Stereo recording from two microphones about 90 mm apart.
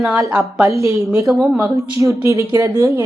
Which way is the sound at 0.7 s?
35° right (ahead or behind).